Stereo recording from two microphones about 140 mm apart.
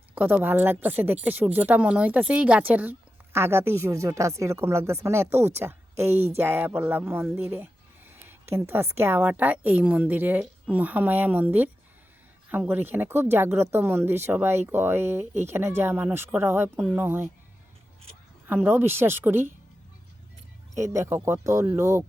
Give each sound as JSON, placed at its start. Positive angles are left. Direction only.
{"t": 0.1, "sound": "a woman's voice", "side_deg": -15}
{"t": 18.4, "sound": "speech", "side_deg": -15}
{"t": 20.9, "sound": "speech", "side_deg": -20}